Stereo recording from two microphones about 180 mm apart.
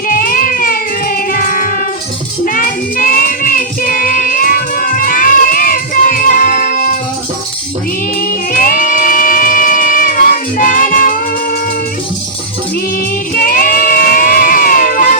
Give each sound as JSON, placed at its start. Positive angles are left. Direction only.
{"t": 0.1, "sound": "music", "side_deg": 50}
{"t": 2.4, "sound": "child singing", "side_deg": 50}
{"t": 8.2, "sound": "music", "side_deg": 50}
{"t": 13.3, "sound": "a sound", "side_deg": 50}